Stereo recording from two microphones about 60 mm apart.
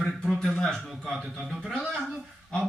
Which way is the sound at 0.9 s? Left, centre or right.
Centre.